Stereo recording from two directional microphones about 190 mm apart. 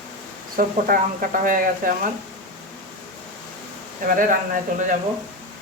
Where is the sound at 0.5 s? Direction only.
45° right (ahead or behind).